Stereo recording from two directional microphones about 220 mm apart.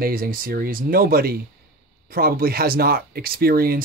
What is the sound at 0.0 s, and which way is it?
Speech, 40° right (ahead or behind).